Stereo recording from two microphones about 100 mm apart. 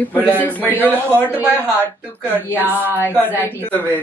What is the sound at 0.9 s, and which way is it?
A man's voice, 20° right (ahead or behind).